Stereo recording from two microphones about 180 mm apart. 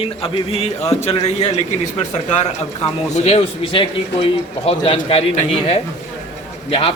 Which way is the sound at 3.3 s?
30° left (ahead or behind).